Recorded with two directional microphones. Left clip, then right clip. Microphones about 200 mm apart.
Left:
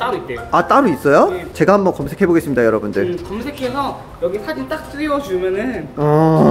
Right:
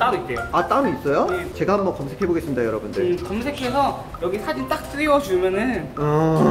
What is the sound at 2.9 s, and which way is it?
Speech, centre (ahead or behind).